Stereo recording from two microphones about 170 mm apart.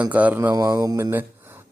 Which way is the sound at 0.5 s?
20° right (ahead or behind).